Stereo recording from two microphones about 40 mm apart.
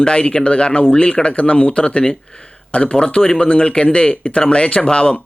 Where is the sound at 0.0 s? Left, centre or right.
Left.